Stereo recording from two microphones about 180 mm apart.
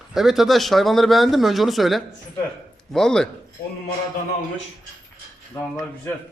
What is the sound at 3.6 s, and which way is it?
Speech, 55° left (ahead or behind).